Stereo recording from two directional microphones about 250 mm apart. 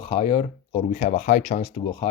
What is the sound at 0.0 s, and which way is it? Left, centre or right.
Speech, left.